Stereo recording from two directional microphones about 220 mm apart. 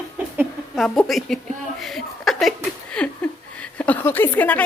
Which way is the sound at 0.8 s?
Centre (ahead or behind).